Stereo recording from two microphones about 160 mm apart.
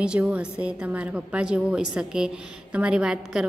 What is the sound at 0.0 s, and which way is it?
A woman's voice, 5° right (ahead or behind).